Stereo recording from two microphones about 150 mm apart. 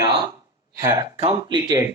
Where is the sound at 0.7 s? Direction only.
20° right (ahead or behind).